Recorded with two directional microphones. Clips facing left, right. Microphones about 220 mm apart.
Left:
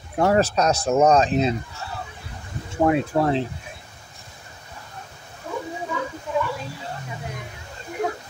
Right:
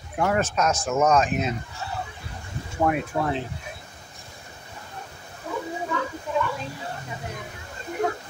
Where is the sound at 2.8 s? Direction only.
25° left (ahead or behind).